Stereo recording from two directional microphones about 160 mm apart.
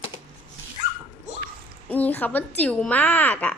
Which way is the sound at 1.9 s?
10° left (ahead or behind).